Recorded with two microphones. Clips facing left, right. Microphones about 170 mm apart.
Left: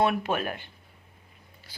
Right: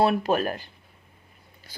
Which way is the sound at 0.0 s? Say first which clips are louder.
Right 4 dB; 35° right (ahead or behind).